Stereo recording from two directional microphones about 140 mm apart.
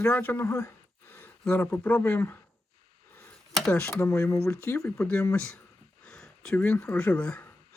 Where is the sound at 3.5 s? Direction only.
5° left (ahead or behind).